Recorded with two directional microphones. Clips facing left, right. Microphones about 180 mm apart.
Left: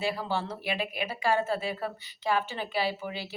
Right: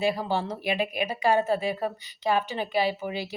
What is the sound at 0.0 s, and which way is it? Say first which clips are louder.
A woman's voice: right 4 dB; 15° right (ahead or behind).